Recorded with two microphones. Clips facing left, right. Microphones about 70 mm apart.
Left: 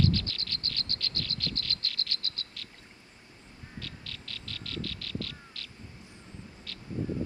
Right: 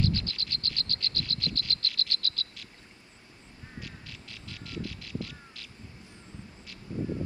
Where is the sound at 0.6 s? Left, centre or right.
Left.